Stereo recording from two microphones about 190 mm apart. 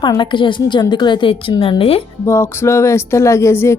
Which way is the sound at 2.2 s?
15° left (ahead or behind).